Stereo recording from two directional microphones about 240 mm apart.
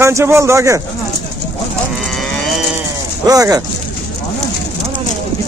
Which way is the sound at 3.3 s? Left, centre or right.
Centre.